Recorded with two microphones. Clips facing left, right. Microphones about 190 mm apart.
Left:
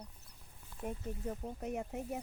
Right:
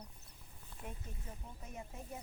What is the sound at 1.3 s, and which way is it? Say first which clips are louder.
Speech: left 14 dB; 65° left (ahead or behind).